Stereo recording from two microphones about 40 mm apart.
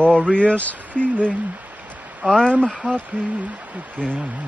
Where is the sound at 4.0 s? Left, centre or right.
Right.